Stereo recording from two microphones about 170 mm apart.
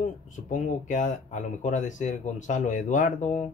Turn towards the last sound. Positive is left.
turn(degrees=50)  # may be behind; listen again after turning